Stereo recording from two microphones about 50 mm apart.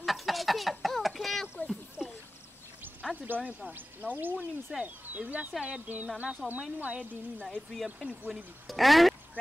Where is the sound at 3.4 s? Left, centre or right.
Right.